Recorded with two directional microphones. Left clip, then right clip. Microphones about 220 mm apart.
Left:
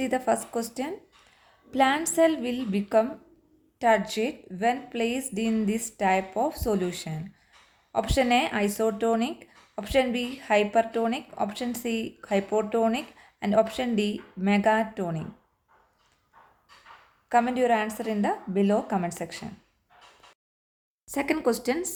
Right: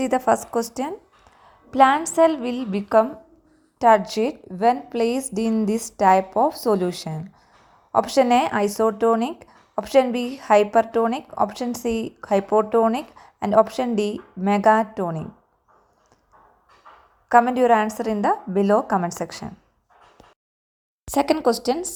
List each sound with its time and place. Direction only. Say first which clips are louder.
0.0 s a woman's voice: right 6 dB; 15° right (ahead or behind)
17.2 s a woman's voice: right 7 dB; 20° right (ahead or behind)
21.1 s speech: right 8 dB; 30° right (ahead or behind)
21.3 s speech: right 5 dB; 15° right (ahead or behind)